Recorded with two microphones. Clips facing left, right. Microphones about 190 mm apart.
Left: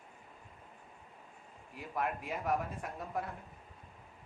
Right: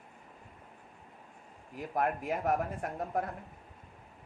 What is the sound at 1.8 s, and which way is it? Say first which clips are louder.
Speech: right 5 dB; 45° right (ahead or behind).